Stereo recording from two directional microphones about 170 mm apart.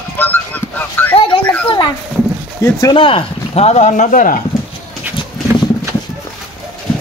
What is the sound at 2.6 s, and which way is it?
Speech, 20° left (ahead or behind).